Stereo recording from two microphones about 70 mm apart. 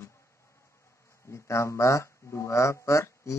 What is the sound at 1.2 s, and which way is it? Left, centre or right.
Speech, left.